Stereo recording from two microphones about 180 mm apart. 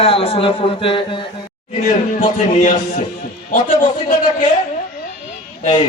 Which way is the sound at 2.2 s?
45° left (ahead or behind).